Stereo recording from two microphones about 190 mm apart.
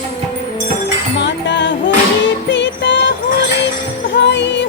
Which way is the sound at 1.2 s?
70° left (ahead or behind).